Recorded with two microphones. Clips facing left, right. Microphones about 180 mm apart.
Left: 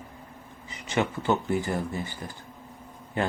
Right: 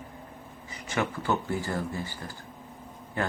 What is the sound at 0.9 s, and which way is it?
Speech, 20° left (ahead or behind).